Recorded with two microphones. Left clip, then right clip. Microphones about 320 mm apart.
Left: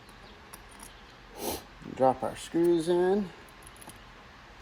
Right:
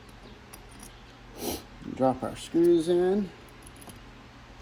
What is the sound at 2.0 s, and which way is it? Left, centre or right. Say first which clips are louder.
Speech: left 1 dB; left.